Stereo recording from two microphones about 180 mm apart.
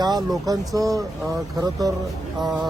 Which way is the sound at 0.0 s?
20° right (ahead or behind).